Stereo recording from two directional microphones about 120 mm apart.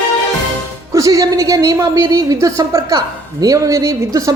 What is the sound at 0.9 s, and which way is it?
Speech, 30° right (ahead or behind).